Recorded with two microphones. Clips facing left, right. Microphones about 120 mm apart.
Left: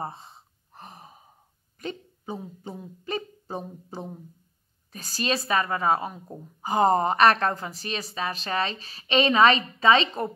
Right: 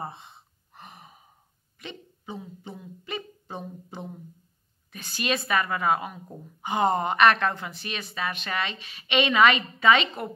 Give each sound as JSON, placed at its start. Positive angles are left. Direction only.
{"t": 0.0, "sound": "gasp", "side_deg": 35}
{"t": 1.8, "sound": "a woman's voice", "side_deg": 40}